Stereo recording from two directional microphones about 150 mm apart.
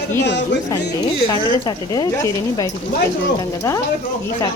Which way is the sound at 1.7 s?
25° left (ahead or behind).